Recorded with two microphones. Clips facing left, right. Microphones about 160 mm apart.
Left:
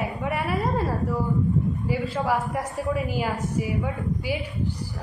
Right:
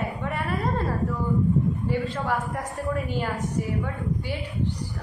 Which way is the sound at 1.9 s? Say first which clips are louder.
Left 5 dB; 10° left (ahead or behind).